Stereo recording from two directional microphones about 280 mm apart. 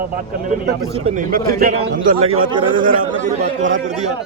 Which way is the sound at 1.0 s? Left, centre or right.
Right.